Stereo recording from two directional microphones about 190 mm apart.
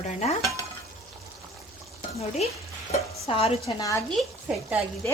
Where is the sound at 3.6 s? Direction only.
15° left (ahead or behind).